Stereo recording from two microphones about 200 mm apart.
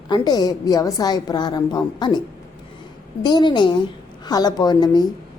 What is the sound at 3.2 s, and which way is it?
A woman's voice, 20° left (ahead or behind).